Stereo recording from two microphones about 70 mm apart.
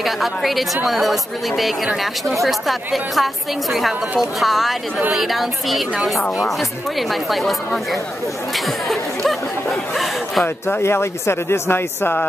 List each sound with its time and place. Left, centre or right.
0.0 s speech: centre
2.2 s speech: centre
7.0 s speech: centre
10.4 s speech: left